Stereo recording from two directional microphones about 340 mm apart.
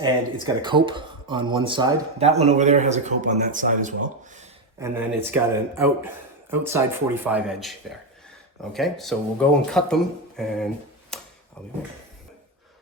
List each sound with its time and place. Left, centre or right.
0.0 s speech: centre
4.8 s speech: centre
11.1 s a sound: centre